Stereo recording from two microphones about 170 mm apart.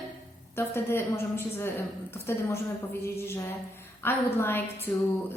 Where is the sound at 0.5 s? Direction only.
15° left (ahead or behind).